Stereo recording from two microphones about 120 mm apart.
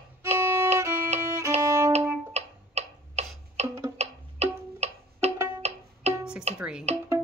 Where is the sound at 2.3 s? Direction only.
65° right (ahead or behind).